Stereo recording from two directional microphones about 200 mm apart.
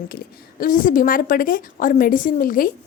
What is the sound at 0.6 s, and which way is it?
A woman's voice, 45° left (ahead or behind).